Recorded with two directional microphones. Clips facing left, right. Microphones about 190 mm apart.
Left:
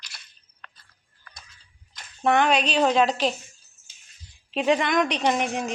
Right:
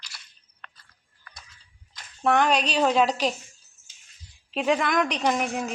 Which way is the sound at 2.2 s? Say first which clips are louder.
Left 1 dB; 5° left (ahead or behind).